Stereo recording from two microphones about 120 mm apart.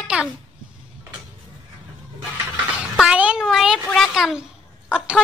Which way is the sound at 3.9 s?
5° right (ahead or behind).